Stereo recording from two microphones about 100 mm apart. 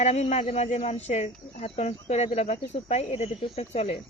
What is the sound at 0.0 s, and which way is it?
Speech, 90° left.